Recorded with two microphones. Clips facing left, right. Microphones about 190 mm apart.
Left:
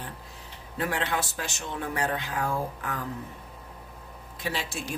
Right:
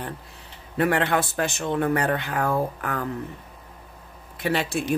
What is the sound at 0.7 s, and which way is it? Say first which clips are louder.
Speech: right 7 dB; 60° right (ahead or behind).